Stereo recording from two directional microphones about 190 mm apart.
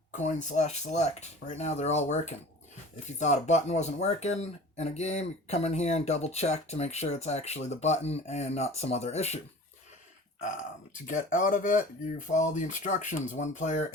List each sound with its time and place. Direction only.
0.1 s speech: 40° left (ahead or behind)
11.1 s speech: 45° left (ahead or behind)